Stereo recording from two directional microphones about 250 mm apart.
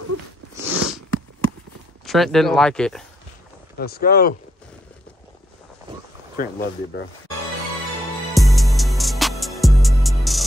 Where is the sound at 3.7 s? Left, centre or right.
Left.